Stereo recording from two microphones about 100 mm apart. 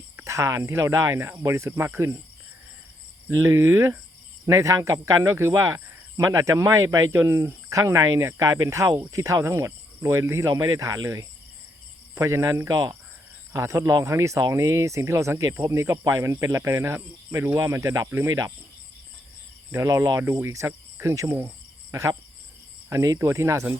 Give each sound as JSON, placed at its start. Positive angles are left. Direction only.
{"t": 0.2, "sound": "speech", "side_deg": -30}
{"t": 3.2, "sound": "speech", "side_deg": -25}
{"t": 19.7, "sound": "speech", "side_deg": -30}
{"t": 22.9, "sound": "speech", "side_deg": -30}